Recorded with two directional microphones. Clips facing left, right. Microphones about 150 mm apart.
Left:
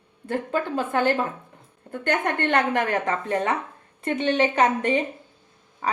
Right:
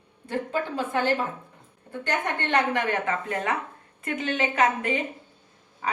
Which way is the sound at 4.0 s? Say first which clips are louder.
Left 6 dB; 30° left (ahead or behind).